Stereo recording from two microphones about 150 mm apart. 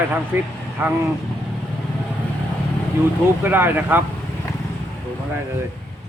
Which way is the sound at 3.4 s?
15° right (ahead or behind).